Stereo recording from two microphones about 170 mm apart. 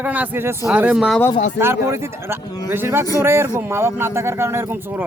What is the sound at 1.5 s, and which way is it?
A man's voice, 15° right (ahead or behind).